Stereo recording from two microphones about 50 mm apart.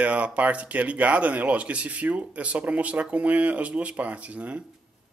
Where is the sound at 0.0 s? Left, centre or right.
Right.